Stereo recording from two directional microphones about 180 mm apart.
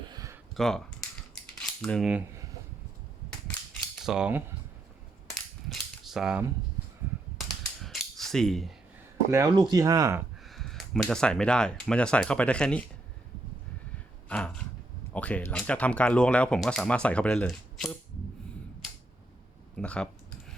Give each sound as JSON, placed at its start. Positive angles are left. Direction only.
{"t": 0.1, "sound": "a sound", "side_deg": -20}
{"t": 0.5, "sound": "speech", "side_deg": 0}
{"t": 1.5, "sound": "a sound", "side_deg": 5}
{"t": 3.9, "sound": "cutlery", "side_deg": 0}
{"t": 5.3, "sound": "cap gun", "side_deg": 0}
{"t": 7.3, "sound": "mechanisms", "side_deg": 0}
{"t": 9.3, "sound": "speech", "side_deg": -20}
{"t": 10.4, "sound": "speech", "side_deg": 0}
{"t": 14.3, "sound": "a sound", "side_deg": 5}
{"t": 15.1, "sound": "speech", "side_deg": 5}
{"t": 19.7, "sound": "computer keyboard", "side_deg": 5}